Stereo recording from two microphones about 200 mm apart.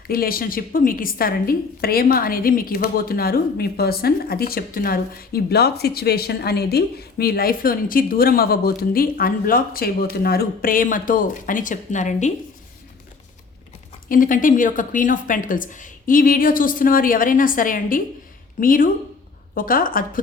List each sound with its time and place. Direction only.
0.1 s a woman's voice: 45° left (ahead or behind)
14.1 s a woman's voice: 40° left (ahead or behind)